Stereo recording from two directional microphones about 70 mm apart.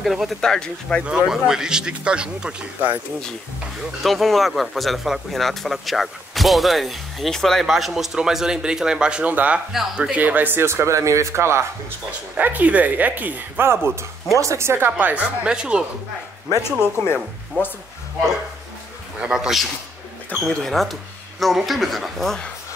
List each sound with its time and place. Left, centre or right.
0.0 s speech: centre
0.4 s speech: centre
1.0 s speech: centre
4.0 s speech: centre
9.3 s speech: right
9.7 s speech: centre
10.1 s speech: right
12.4 s speech: right
16.8 s speech: left
19.1 s speech: centre
20.3 s speech: centre